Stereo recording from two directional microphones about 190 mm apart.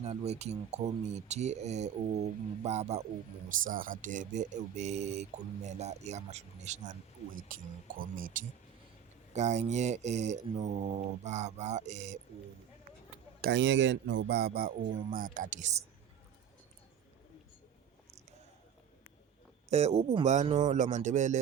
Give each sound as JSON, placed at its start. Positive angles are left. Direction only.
{"t": 0.1, "sound": "mantra", "side_deg": -35}
{"t": 3.6, "sound": "mantra", "side_deg": -45}
{"t": 8.4, "sound": "speech", "side_deg": -45}
{"t": 9.3, "sound": "mantra", "side_deg": -35}
{"t": 13.4, "sound": "speech", "side_deg": -65}
{"t": 19.7, "sound": "mantra", "side_deg": -35}